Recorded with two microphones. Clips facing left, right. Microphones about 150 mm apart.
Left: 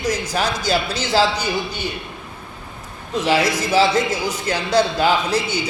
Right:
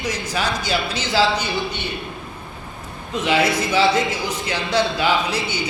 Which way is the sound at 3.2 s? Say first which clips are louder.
Even; 40° left (ahead or behind).